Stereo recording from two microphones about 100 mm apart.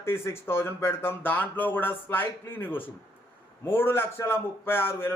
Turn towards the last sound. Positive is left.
turn(degrees=25)  # may be behind; listen again after turning